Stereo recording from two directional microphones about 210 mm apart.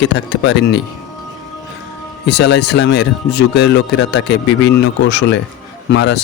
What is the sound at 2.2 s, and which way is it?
Speech, 55° left (ahead or behind).